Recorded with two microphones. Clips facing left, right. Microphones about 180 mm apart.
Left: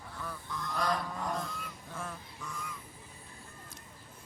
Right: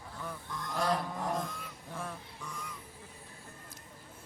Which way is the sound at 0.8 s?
30° right (ahead or behind).